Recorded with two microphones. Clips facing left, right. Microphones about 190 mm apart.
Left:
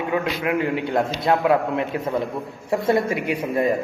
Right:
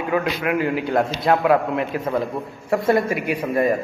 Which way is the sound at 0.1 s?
25° left (ahead or behind).